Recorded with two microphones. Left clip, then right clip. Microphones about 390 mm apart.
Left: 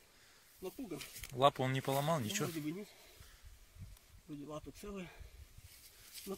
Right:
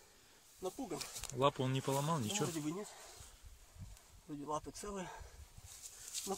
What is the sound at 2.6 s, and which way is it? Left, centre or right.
Speech, right.